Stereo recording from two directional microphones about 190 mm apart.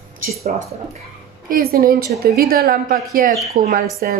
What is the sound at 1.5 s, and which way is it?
A woman's voice, 50° right (ahead or behind).